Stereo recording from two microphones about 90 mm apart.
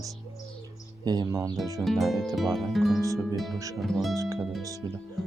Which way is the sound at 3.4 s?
Centre (ahead or behind).